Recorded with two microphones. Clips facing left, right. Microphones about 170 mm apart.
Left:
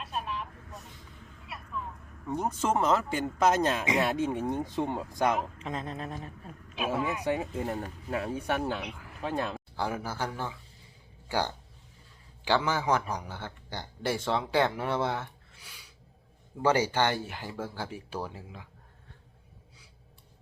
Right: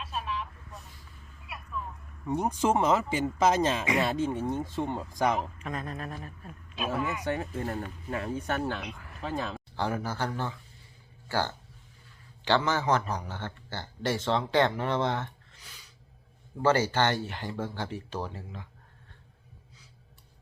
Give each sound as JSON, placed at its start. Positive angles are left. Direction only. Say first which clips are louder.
{"t": 0.0, "sound": "vehicle", "louder": "right 1 dB", "side_deg": 0}
{"t": 2.2, "sound": "a man's voice", "louder": "right 3 dB", "side_deg": -10}
{"t": 5.5, "sound": "a man's voice", "louder": "even", "side_deg": 20}